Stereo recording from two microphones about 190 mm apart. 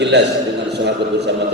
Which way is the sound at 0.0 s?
65° right (ahead or behind).